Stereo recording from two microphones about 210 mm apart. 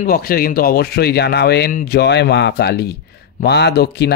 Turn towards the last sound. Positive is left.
turn(degrees=50)  # may be behind; listen again after turning